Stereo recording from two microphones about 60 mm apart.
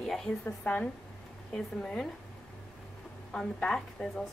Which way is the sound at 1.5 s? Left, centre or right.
Centre.